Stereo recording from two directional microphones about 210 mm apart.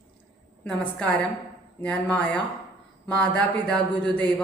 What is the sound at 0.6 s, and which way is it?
Speech, 5° left (ahead or behind).